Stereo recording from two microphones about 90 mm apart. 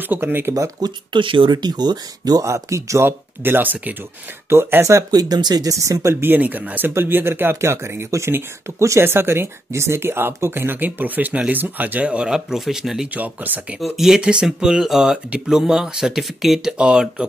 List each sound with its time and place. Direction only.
0.1 s speech: 25° right (ahead or behind)
0.6 s speech: 50° right (ahead or behind)
1.2 s speech: 70° right (ahead or behind)
1.6 s speech: 50° right (ahead or behind)
6.2 s speech: 20° right (ahead or behind); by 13.1 s 5° right (ahead or behind)
13.1 s speech: 20° right (ahead or behind)
13.7 s speech: centre (ahead or behind)